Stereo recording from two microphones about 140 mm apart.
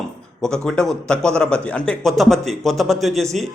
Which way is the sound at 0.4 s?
5° left (ahead or behind).